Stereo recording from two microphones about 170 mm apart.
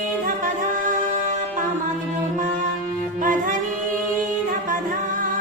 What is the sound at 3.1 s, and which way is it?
Music, 50° right (ahead or behind).